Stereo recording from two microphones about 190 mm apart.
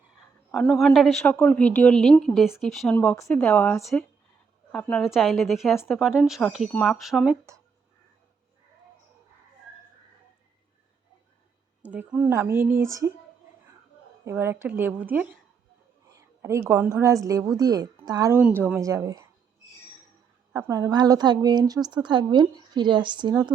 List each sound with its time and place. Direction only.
0.5 s a woman's voice: centre (ahead or behind)
11.8 s a woman's voice: 10° right (ahead or behind)
14.3 s a woman's voice: 10° right (ahead or behind)
16.1 s a sound: 15° right (ahead or behind)
16.6 s a woman's voice: 15° right (ahead or behind)
20.5 s a woman's voice: 15° right (ahead or behind)